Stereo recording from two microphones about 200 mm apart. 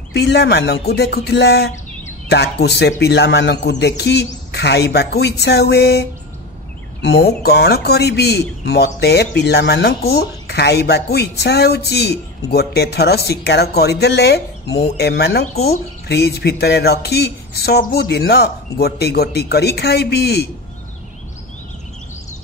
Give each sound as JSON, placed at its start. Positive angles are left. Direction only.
{"t": 0.1, "sound": "speech", "side_deg": 55}